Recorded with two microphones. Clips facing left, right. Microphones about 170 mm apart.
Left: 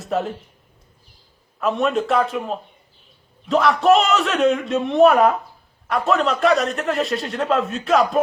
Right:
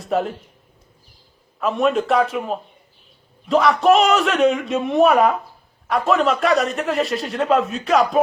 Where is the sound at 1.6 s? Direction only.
Centre (ahead or behind).